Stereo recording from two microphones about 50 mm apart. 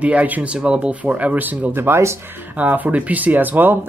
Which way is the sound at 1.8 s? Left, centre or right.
Right.